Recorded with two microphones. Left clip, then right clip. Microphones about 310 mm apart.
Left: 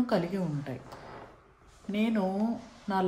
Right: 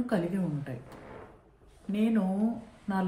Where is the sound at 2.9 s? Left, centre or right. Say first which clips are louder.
Left 3 dB; left.